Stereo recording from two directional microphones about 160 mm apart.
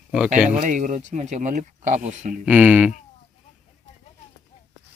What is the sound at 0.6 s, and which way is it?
Speech, 55° right (ahead or behind).